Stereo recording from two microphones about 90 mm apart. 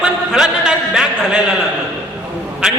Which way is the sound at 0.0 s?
5° right (ahead or behind).